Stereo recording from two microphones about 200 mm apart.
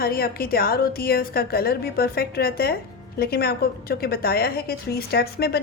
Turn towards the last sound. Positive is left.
turn(degrees=50)  # may be behind; listen again after turning